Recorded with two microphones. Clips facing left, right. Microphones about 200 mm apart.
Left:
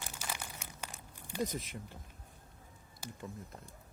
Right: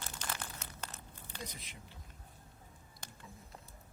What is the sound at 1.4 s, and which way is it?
Speech, 45° left (ahead or behind).